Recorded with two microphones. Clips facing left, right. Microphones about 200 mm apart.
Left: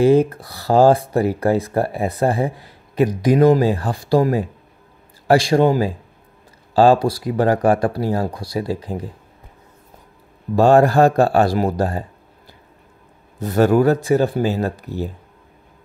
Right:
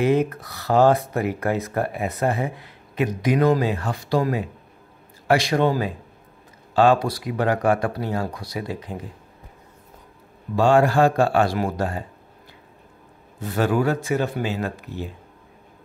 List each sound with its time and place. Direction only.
0.0 s speech: 30° left (ahead or behind)
10.5 s speech: 40° left (ahead or behind)
13.4 s speech: 40° left (ahead or behind)